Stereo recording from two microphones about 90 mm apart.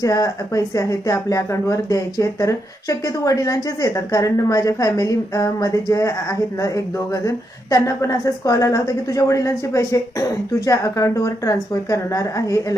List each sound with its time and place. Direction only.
0.0 s a woman's voice: 40° left (ahead or behind)